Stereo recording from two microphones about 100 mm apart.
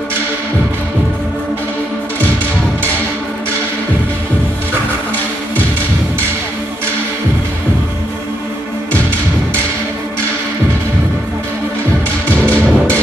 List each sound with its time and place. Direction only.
12.4 s music: 15° left (ahead or behind)